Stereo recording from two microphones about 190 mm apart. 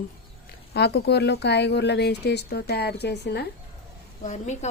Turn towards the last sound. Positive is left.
turn(degrees=40)  # may be behind; listen again after turning